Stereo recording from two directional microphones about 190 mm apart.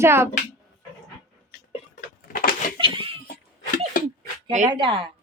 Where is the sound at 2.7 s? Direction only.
25° right (ahead or behind).